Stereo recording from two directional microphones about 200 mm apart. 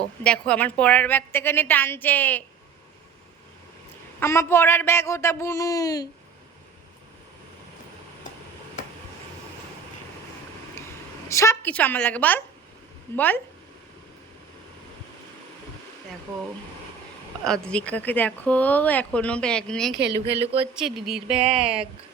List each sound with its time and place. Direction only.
0.2 s a woman's voice: 5° left (ahead or behind)
4.2 s a woman's voice: 15° left (ahead or behind)
11.3 s a woman's voice: 15° left (ahead or behind)
17.4 s speech: 5° left (ahead or behind)
20.4 s speech: 30° right (ahead or behind)
20.7 s speech: centre (ahead or behind)
21.3 s speech: 30° right (ahead or behind)